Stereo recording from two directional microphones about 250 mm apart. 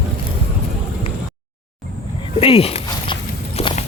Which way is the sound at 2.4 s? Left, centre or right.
Left.